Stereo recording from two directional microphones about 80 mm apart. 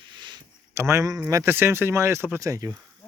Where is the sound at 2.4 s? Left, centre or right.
Right.